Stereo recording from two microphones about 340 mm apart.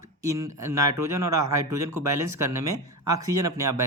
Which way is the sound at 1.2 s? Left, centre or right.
Right.